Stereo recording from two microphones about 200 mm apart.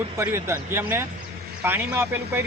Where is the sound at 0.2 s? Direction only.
15° right (ahead or behind).